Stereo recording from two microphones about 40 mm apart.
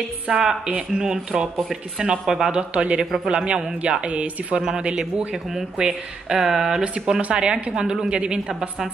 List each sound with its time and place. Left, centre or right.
0.3 s a woman's voice: centre
2.5 s a woman's voice: right
4.6 s a woman's voice: centre
5.3 s speech: centre
7.2 s speech: right
7.7 s a woman's voice: centre